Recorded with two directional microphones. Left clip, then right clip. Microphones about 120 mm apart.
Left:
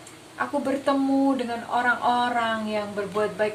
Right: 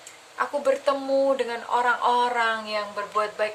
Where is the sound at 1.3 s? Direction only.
25° right (ahead or behind).